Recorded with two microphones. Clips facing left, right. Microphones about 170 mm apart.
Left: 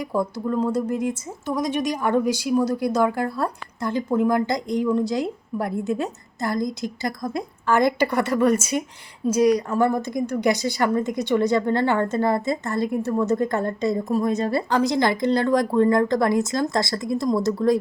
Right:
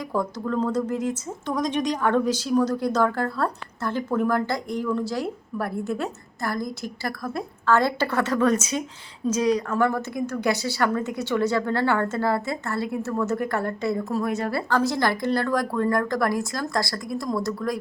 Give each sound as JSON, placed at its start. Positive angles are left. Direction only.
{"t": 0.0, "sound": "a woman's voice", "side_deg": 10}